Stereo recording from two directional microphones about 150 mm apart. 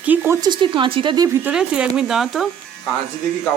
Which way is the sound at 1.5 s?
5° right (ahead or behind).